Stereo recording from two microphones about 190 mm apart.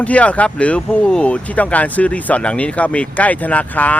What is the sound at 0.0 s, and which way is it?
A man's voice, 5° left (ahead or behind).